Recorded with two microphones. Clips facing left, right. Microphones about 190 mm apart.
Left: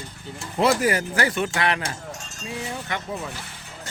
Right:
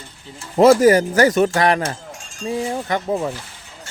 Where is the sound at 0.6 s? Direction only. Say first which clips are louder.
Right 10 dB; 40° right (ahead or behind).